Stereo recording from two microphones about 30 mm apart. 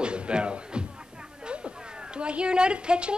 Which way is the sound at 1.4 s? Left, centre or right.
Right.